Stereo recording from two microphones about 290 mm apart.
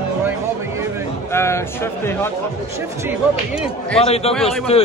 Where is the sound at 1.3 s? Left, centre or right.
Centre.